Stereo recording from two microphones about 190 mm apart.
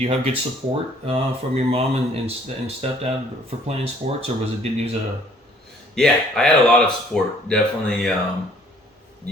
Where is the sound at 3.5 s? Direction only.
30° right (ahead or behind).